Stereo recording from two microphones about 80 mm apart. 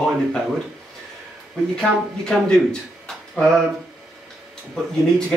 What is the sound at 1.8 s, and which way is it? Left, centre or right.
Speech, centre.